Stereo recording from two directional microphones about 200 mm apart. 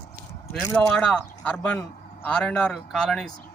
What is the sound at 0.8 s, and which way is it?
A man's voice, 5° left (ahead or behind).